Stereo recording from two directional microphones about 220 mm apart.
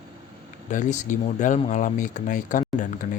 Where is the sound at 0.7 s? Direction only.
35° left (ahead or behind).